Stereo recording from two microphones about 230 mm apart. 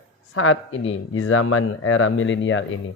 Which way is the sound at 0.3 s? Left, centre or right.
Left.